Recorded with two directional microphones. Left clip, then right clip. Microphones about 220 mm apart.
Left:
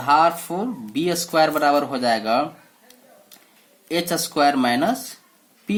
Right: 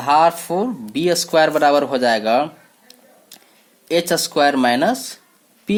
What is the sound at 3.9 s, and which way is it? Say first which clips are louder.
Speech: right 5 dB; 40° right (ahead or behind).